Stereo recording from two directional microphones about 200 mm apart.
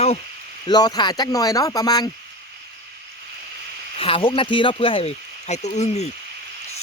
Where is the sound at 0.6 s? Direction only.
20° left (ahead or behind).